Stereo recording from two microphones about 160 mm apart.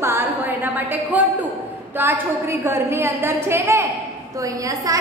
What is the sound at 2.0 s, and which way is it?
A woman's voice, 15° right (ahead or behind).